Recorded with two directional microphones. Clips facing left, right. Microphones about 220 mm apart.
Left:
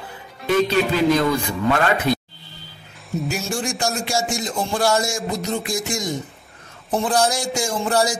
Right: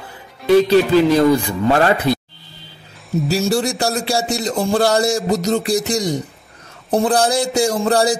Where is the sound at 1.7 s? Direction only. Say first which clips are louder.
Right 5 dB; 35° right (ahead or behind).